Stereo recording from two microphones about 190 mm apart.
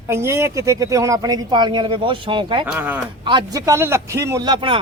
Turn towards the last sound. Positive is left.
turn(degrees=-25)  # may be behind; listen again after turning